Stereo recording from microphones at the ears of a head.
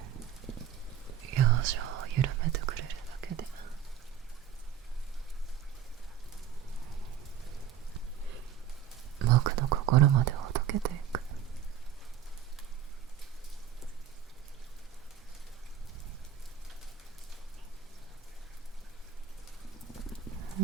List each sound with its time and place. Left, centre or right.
1.0 s whispering: right
7.5 s rain on surface: right
9.1 s whispering: right